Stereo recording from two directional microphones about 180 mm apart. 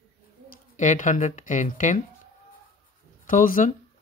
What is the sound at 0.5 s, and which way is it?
Speech, 45° left (ahead or behind).